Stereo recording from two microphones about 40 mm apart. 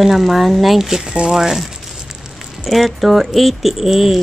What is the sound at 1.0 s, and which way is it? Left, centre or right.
Speech, centre.